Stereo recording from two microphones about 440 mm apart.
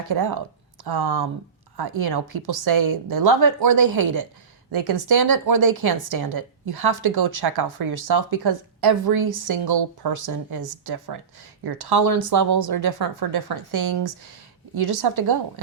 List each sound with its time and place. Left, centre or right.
0.9 s a woman's voice: right
4.7 s a woman's voice: right
10.1 s speech: right
11.6 s a woman's voice: right